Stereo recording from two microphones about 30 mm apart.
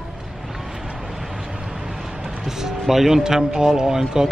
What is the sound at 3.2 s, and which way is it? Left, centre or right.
Speech, right.